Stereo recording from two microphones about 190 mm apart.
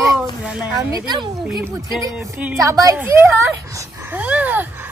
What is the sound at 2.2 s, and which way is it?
Speech, 10° right (ahead or behind).